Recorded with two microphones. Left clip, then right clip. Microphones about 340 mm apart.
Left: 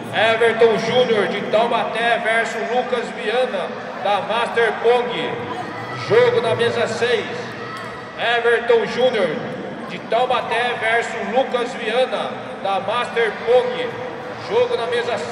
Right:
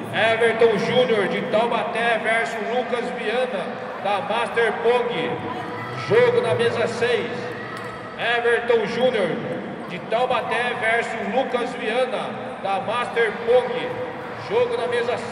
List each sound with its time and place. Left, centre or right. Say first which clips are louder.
0.1 s a man's voice: left 3 dB; left
8.2 s a man's voice: left 3 dB; left